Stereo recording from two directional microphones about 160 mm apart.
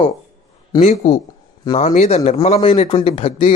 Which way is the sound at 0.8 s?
50° left (ahead or behind).